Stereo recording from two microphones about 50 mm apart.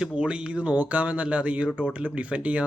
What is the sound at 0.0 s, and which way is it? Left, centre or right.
Speech, right.